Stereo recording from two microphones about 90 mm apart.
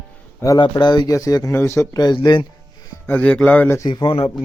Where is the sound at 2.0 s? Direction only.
50° left (ahead or behind).